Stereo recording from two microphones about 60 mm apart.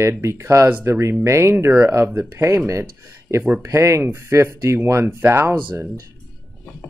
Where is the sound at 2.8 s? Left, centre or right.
Right.